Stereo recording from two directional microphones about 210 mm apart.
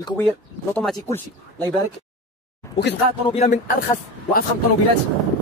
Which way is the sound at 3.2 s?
35° left (ahead or behind).